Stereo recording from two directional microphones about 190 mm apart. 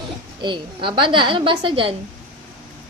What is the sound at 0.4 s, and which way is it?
A woman's voice, 25° right (ahead or behind).